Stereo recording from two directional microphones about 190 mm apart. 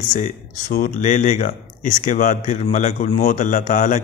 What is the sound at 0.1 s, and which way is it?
Speech, 40° left (ahead or behind).